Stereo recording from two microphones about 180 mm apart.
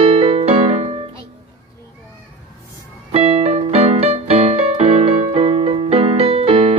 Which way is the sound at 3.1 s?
35° right (ahead or behind).